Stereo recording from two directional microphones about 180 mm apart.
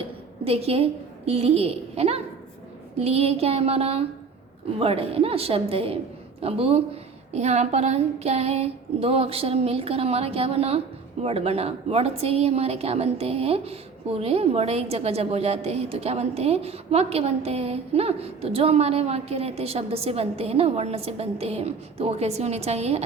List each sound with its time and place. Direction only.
0.4 s a woman's voice: 35° right (ahead or behind)